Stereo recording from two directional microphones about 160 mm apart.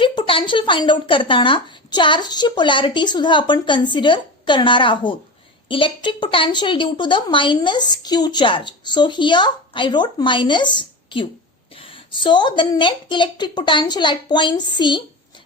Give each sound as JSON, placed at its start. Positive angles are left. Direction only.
{"t": 0.0, "sound": "speech", "side_deg": 35}